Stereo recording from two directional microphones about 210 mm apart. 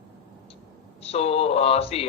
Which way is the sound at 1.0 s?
30° left (ahead or behind).